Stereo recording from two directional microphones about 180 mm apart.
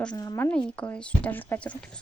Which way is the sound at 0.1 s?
20° left (ahead or behind).